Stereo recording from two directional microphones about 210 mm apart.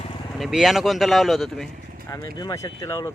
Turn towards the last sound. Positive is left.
turn(degrees=15)  # may be behind; listen again after turning